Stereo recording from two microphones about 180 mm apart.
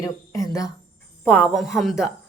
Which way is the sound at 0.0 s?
20° left (ahead or behind).